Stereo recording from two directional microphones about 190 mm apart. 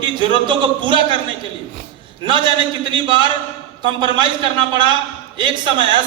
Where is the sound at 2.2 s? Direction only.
25° right (ahead or behind).